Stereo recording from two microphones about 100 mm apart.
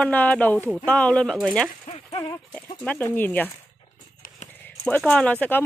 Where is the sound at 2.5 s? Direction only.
15° left (ahead or behind).